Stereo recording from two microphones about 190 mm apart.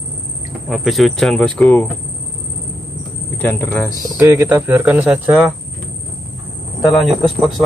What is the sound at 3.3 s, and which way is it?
Speech, 10° left (ahead or behind).